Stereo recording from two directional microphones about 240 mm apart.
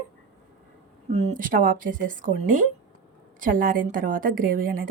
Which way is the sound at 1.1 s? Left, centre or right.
Right.